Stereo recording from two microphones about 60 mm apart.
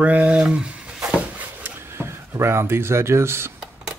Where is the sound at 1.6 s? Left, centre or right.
Right.